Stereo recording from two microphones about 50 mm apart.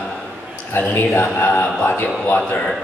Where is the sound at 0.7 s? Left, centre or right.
Left.